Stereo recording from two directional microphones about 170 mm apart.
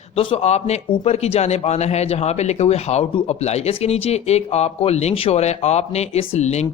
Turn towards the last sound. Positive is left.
turn(degrees=40)  # may be behind; listen again after turning